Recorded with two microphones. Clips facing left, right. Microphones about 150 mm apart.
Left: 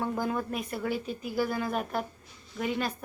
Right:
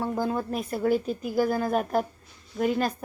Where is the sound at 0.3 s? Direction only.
35° right (ahead or behind).